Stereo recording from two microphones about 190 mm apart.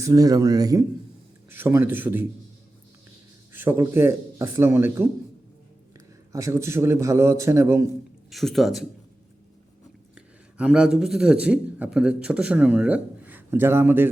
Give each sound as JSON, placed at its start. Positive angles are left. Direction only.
{"t": 0.0, "sound": "a man's voice", "side_deg": -20}
{"t": 3.5, "sound": "a man's voice", "side_deg": -10}
{"t": 6.3, "sound": "a man's voice", "side_deg": -15}
{"t": 8.3, "sound": "a man's voice", "side_deg": 0}
{"t": 10.2, "sound": "a man's voice", "side_deg": -5}